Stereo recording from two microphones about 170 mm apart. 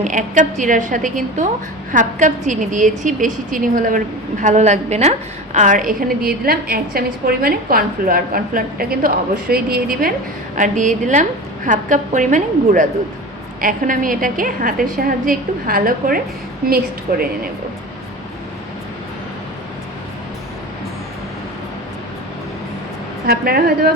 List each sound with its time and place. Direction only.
0.0 s a woman's voice: 45° right (ahead or behind)
10.6 s a woman's voice: 45° right (ahead or behind)
23.2 s a woman's voice: 65° right (ahead or behind)